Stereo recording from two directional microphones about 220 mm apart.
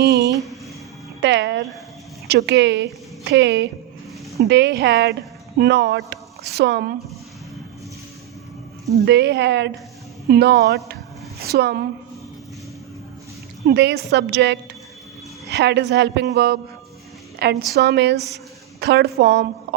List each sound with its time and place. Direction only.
1.2 s music: 55° right (ahead or behind)
2.2 s a woman's voice: 50° right (ahead or behind)
9.0 s speech: 50° right (ahead or behind)
13.7 s speech: 50° right (ahead or behind)